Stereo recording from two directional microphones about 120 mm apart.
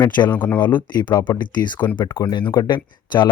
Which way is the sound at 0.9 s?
35° left (ahead or behind).